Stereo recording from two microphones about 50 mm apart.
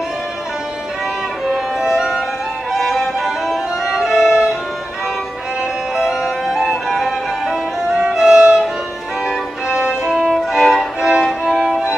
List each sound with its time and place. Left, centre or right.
1.8 s music: centre
3.4 s violin: centre
5.9 s music: centre
10.0 s violin: centre
11.0 s music: centre